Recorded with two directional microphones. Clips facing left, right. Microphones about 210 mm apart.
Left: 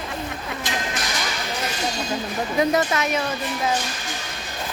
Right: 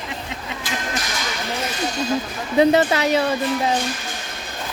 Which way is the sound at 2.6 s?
30° right (ahead or behind).